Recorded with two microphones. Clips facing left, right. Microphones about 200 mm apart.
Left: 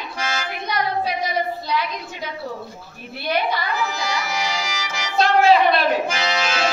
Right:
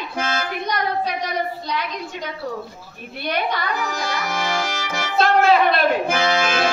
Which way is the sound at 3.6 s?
50° right (ahead or behind).